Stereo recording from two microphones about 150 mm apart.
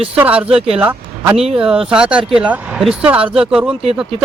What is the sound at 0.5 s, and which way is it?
Speech, 40° right (ahead or behind).